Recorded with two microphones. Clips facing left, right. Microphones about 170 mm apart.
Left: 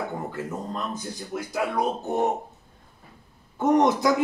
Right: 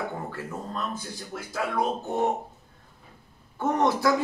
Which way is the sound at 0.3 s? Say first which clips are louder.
Left 3 dB; 20° left (ahead or behind).